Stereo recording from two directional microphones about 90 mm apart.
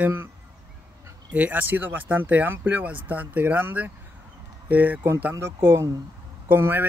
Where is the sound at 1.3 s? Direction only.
20° right (ahead or behind).